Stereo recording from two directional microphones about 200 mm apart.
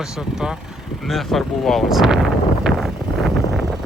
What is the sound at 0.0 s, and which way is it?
Speech, 5° right (ahead or behind).